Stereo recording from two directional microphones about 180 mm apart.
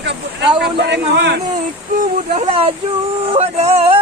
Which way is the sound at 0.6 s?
75° right (ahead or behind).